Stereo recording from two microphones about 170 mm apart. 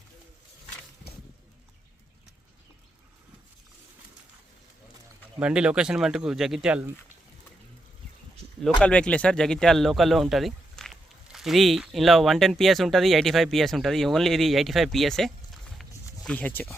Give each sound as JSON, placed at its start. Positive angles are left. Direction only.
{"t": 5.4, "sound": "speech", "side_deg": -5}
{"t": 8.8, "sound": "speech", "side_deg": 5}